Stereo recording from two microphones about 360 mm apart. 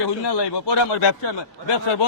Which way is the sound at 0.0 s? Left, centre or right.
Left.